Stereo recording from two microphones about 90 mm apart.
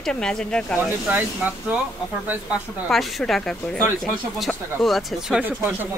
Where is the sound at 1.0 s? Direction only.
15° right (ahead or behind).